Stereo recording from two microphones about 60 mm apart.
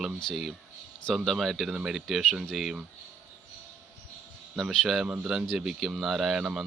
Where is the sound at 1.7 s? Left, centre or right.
Centre.